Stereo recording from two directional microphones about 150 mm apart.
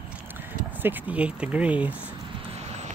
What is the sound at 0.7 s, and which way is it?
Speech, 10° right (ahead or behind).